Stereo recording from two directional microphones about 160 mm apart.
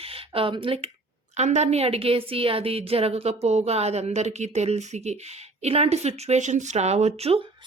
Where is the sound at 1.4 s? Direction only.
45° right (ahead or behind).